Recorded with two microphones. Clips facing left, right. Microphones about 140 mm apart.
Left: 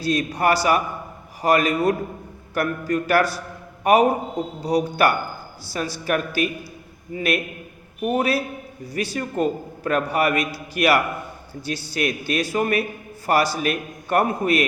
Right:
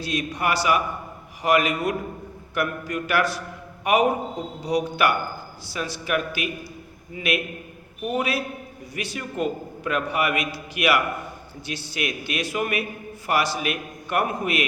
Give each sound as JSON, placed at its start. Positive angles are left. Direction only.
{"t": 0.0, "sound": "a man's voice", "side_deg": 35}